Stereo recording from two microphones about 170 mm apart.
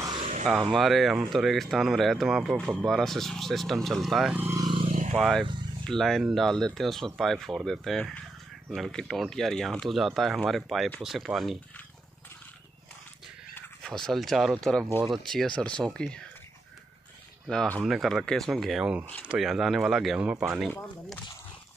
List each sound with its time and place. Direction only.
0.0 s a sound: 30° right (ahead or behind)
0.7 s speech: centre (ahead or behind)
4.8 s vehicle: 50° right (ahead or behind)
5.1 s speech: centre (ahead or behind)
13.6 s speech: 5° left (ahead or behind)
17.5 s speech: 5° left (ahead or behind)